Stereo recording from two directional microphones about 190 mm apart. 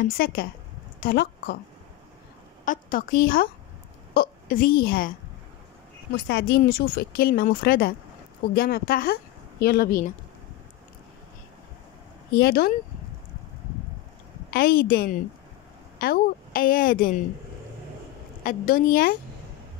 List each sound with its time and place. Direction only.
0.2 s a woman's voice: 55° left (ahead or behind)
2.6 s a woman's voice: 45° left (ahead or behind)
6.1 s speech: 60° left (ahead or behind)
12.4 s speech: 55° left (ahead or behind)
14.5 s speech: 50° left (ahead or behind)
18.4 s speech: 45° left (ahead or behind)